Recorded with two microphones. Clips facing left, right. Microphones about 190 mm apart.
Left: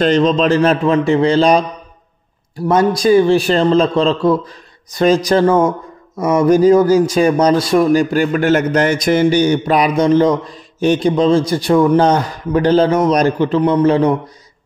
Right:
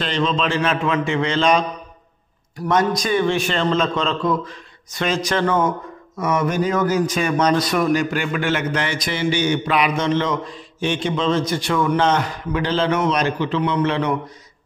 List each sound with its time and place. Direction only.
0.0 s speech: 40° left (ahead or behind)